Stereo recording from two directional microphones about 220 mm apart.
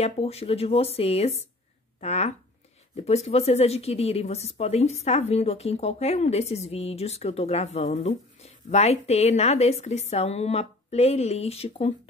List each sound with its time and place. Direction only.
0.0 s a woman's voice: 30° left (ahead or behind)